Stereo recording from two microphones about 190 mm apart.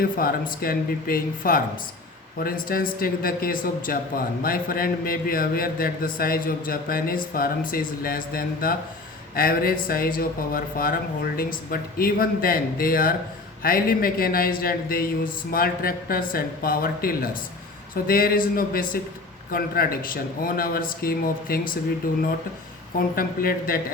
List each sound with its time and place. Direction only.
0.2 s a man's voice: 50° left (ahead or behind)